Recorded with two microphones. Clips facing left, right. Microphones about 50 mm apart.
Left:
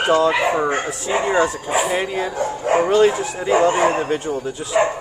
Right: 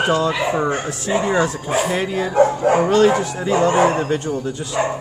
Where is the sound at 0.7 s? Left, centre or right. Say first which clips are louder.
Even; left.